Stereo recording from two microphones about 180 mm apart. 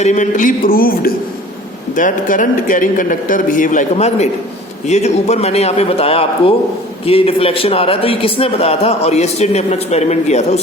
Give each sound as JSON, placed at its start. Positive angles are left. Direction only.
{"t": 0.0, "sound": "a man's voice", "side_deg": 40}